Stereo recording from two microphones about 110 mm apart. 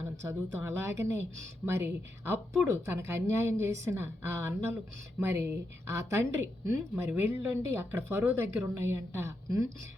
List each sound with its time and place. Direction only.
0.0 s a woman's voice: 25° right (ahead or behind)